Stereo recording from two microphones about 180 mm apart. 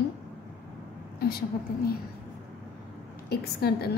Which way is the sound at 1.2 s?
60° left (ahead or behind).